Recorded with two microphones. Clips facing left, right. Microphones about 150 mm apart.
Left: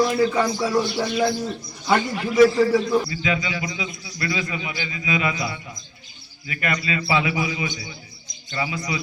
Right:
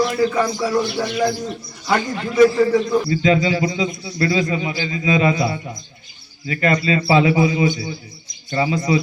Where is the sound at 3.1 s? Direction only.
35° right (ahead or behind).